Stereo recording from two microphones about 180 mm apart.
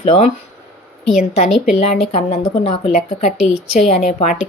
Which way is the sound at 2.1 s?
35° left (ahead or behind).